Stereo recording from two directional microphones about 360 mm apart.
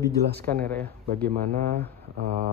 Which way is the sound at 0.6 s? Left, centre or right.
Centre.